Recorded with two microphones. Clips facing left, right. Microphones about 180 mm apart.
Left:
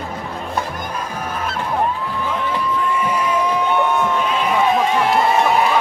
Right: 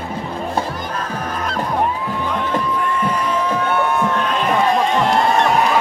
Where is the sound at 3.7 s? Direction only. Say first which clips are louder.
Even; 5° right (ahead or behind).